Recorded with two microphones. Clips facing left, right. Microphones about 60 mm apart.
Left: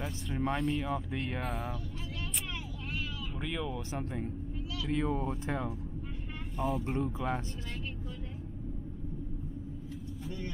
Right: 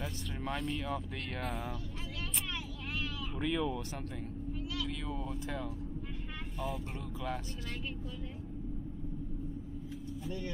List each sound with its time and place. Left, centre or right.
0.4 s speech: left
3.3 s speech: centre
4.8 s speech: left
7.0 s speech: left